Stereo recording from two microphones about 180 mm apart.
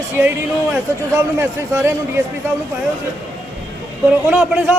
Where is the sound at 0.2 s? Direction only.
10° right (ahead or behind).